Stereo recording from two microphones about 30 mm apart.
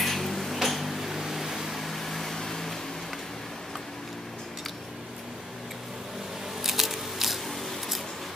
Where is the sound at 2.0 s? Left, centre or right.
Centre.